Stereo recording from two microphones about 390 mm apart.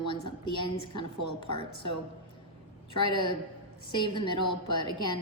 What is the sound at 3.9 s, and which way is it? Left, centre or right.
A woman's voice, centre.